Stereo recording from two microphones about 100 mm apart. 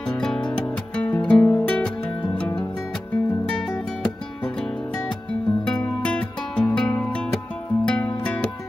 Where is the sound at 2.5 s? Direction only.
50° left (ahead or behind).